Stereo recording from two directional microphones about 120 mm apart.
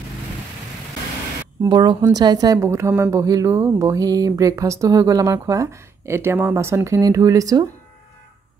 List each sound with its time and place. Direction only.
1.7 s a woman's voice: 40° right (ahead or behind)